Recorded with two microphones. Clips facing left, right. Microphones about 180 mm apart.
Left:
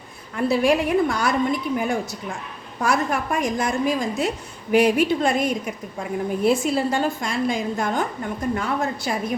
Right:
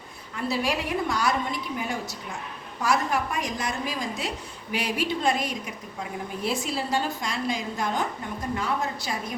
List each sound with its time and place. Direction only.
0.3 s a woman's voice: 55° left (ahead or behind)